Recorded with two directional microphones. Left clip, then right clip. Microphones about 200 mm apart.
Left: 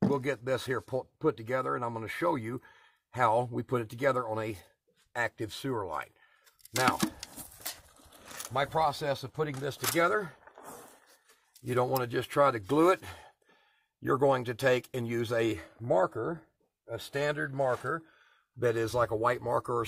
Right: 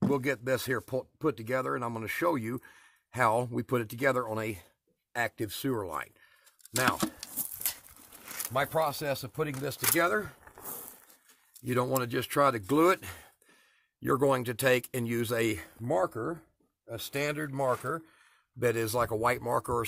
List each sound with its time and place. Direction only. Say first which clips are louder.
0.1 s speech: right 1 dB; 40° right (ahead or behind)
8.2 s speech: right 1 dB; 45° right (ahead or behind)
10.4 s vehicle: right 1 dB; 60° right (ahead or behind)
11.6 s speech: even; 40° right (ahead or behind)